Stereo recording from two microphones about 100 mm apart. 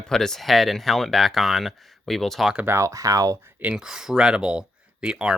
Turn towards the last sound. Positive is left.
turn(degrees=-10)  # may be behind; listen again after turning